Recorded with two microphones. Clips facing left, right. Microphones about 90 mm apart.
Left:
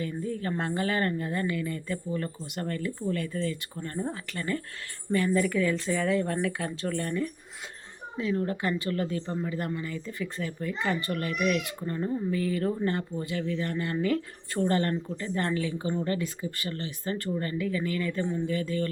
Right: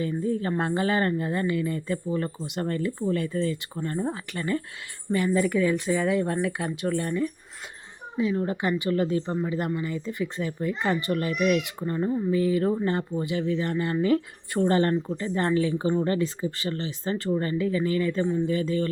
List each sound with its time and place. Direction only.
0.0 s speech: 25° right (ahead or behind)